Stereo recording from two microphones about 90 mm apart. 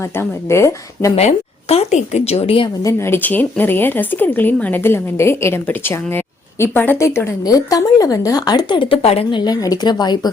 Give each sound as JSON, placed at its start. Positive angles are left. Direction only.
{"t": 0.2, "sound": "speech", "side_deg": 30}
{"t": 1.7, "sound": "a woman's voice", "side_deg": 90}
{"t": 2.8, "sound": "speech", "side_deg": 25}
{"t": 7.4, "sound": "speech", "side_deg": 40}
{"t": 9.4, "sound": "speech", "side_deg": 45}